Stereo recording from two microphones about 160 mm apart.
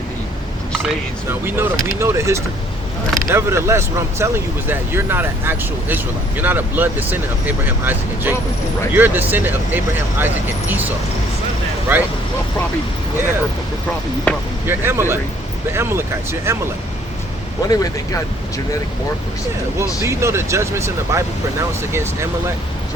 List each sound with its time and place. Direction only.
1.3 s speech: 15° right (ahead or behind)
14.3 s speech: 10° left (ahead or behind)
14.7 s speech: 15° right (ahead or behind)
17.7 s speech: 20° left (ahead or behind)
20.1 s speech: 15° right (ahead or behind)